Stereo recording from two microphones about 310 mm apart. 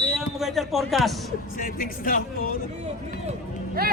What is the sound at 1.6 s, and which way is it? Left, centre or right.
Speech, left.